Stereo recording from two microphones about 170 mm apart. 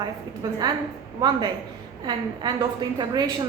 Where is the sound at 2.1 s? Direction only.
25° right (ahead or behind).